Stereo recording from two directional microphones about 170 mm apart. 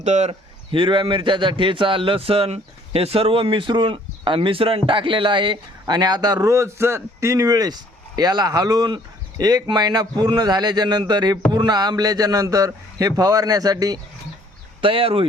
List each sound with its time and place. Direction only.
0.0 s speech: 40° right (ahead or behind)